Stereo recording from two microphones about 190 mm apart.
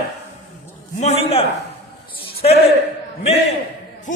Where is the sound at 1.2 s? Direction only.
30° left (ahead or behind).